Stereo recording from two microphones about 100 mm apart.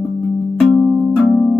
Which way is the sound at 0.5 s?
5° left (ahead or behind).